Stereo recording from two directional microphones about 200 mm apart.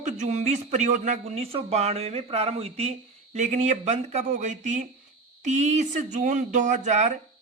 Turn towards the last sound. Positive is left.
turn(degrees=-35)  # may be behind; listen again after turning